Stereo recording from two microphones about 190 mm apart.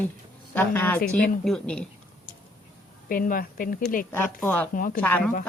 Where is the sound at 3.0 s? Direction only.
50° left (ahead or behind).